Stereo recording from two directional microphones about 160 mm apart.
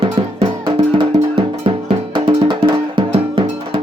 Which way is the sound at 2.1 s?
30° right (ahead or behind).